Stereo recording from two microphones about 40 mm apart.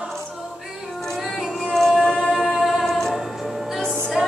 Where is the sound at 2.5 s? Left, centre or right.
Centre.